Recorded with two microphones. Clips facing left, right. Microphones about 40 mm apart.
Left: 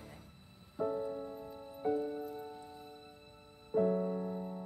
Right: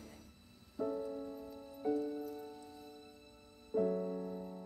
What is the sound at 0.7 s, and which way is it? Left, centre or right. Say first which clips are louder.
Music: left 3 dB; left.